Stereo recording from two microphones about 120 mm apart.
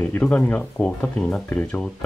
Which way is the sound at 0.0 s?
10° left (ahead or behind).